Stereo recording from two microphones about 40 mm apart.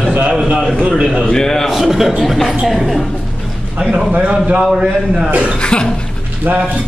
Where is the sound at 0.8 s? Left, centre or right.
Right.